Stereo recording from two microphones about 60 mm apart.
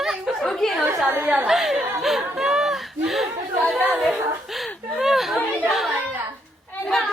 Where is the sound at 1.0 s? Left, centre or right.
Right.